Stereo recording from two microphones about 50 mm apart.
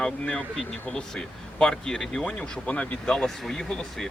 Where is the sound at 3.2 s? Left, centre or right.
Centre.